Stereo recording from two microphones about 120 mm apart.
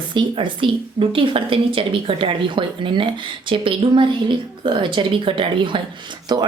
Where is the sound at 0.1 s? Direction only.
45° right (ahead or behind).